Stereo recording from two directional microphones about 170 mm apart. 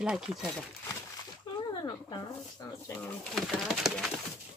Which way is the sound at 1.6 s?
25° left (ahead or behind).